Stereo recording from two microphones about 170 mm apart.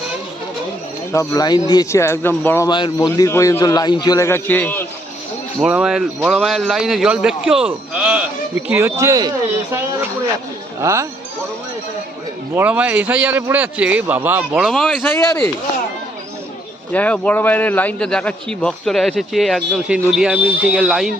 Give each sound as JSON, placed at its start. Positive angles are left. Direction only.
{"t": 1.1, "sound": "a man's voice", "side_deg": 15}
{"t": 2.6, "sound": "a man's voice", "side_deg": 25}
{"t": 5.5, "sound": "a man's voice", "side_deg": -5}
{"t": 10.8, "sound": "speech", "side_deg": -15}
{"t": 12.5, "sound": "a man's voice", "side_deg": -10}
{"t": 16.9, "sound": "a man's voice", "side_deg": 10}